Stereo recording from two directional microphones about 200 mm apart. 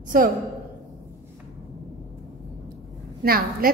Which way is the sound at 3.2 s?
50° right (ahead or behind).